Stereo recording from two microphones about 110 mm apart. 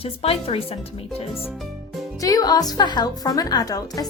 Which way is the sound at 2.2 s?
35° left (ahead or behind).